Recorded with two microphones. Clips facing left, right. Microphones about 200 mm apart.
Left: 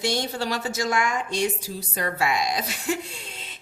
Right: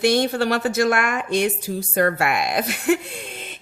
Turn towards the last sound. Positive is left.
turn(degrees=-55)  # may be behind; listen again after turning